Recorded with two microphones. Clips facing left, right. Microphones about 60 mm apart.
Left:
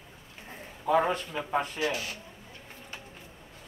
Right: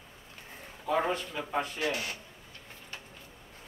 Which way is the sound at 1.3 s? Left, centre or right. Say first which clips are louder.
Left 3 dB; centre.